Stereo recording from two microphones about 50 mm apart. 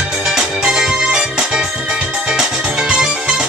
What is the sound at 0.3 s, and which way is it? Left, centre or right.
Music, centre.